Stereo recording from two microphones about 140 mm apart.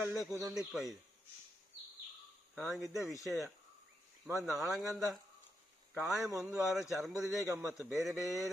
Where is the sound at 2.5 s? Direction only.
Centre (ahead or behind).